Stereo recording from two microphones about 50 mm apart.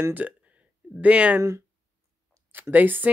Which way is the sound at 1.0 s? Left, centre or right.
Right.